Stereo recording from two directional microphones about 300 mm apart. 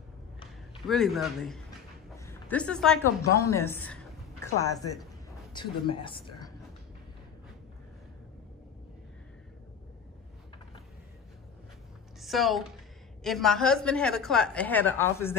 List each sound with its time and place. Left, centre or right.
0.8 s a woman's voice: centre
12.2 s a woman's voice: centre